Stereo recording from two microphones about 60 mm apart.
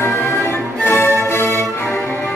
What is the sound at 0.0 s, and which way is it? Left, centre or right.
Music, left.